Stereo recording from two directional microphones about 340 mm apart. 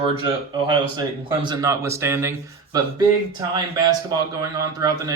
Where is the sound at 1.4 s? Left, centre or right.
Centre.